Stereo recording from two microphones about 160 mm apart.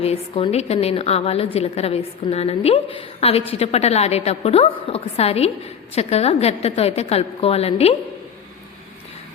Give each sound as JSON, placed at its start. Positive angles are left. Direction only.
{"t": 0.0, "sound": "a woman's voice", "side_deg": 40}